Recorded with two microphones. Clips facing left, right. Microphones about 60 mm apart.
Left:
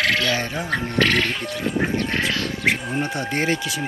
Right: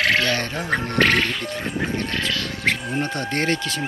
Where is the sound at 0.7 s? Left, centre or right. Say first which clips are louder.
Right 2 dB; right.